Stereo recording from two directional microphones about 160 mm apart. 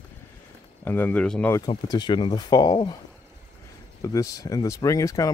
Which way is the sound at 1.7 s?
25° left (ahead or behind).